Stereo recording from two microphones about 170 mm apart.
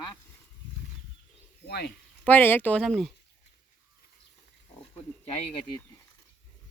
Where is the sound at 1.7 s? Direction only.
75° left (ahead or behind).